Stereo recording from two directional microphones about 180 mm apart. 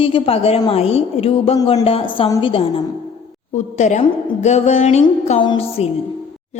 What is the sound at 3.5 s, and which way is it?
A woman's voice, 40° left (ahead or behind).